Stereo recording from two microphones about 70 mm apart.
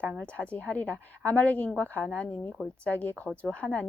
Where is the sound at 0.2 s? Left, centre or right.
Centre.